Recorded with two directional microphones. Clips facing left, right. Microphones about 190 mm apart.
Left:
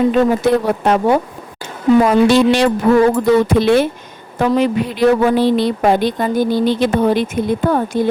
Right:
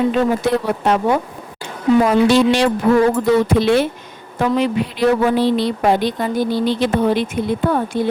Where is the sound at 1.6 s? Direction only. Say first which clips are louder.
Left 2 dB; 55° left (ahead or behind).